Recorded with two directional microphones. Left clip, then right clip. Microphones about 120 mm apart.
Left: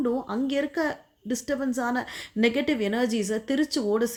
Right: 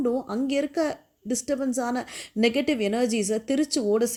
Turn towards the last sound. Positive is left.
turn(degrees=-35)  # may be behind; listen again after turning